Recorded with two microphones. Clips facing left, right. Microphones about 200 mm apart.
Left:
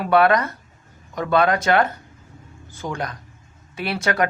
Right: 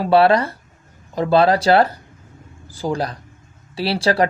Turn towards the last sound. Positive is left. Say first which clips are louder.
# right 4 dB
turn(degrees=-30)  # may be behind; listen again after turning